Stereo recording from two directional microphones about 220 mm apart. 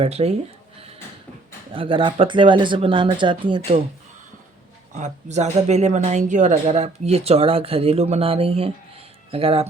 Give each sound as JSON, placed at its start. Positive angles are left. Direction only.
{"t": 0.0, "sound": "speech", "side_deg": -30}
{"t": 1.7, "sound": "speech", "side_deg": -25}
{"t": 4.9, "sound": "speech", "side_deg": -30}